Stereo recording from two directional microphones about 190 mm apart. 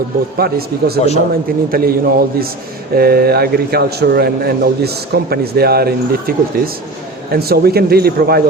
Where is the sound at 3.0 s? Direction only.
55° right (ahead or behind).